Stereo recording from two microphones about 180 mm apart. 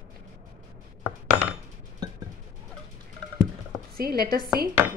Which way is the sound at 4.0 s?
55° right (ahead or behind).